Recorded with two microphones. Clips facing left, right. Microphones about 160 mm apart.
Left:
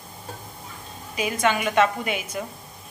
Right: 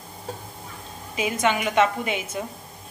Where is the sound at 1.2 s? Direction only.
20° right (ahead or behind).